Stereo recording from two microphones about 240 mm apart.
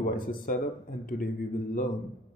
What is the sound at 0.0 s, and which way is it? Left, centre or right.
Speech, left.